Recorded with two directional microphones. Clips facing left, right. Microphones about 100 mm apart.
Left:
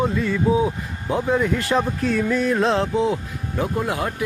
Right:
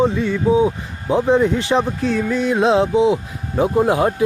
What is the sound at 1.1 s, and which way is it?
Speech, 25° right (ahead or behind).